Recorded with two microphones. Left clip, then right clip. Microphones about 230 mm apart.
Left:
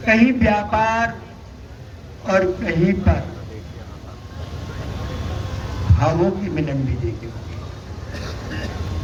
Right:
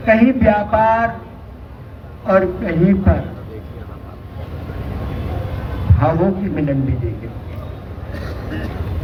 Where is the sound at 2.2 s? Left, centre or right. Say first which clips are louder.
Right 3 dB; left.